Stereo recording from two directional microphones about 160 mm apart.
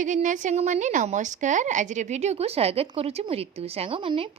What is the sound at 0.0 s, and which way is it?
A woman's voice, 50° right (ahead or behind).